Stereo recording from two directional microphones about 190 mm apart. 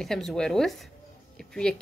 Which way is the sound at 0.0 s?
Centre (ahead or behind).